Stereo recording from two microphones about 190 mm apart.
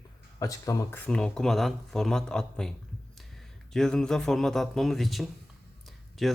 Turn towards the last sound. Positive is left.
turn(degrees=0)  # may be behind; listen again after turning